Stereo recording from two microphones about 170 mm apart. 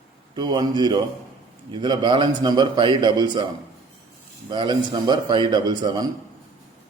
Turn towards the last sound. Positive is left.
turn(degrees=-25)  # may be behind; listen again after turning